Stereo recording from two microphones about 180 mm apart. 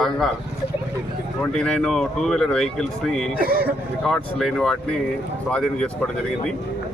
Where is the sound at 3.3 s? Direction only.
55° right (ahead or behind).